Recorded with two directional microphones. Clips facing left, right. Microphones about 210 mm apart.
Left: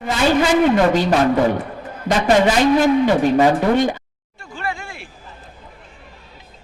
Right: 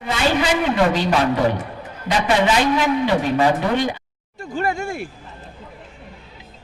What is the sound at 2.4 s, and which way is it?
A man's voice, 45° left (ahead or behind).